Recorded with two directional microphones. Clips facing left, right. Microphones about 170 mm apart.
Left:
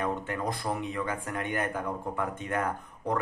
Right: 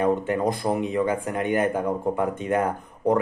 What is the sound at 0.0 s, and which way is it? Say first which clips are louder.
Speech: right 9 dB; 20° right (ahead or behind).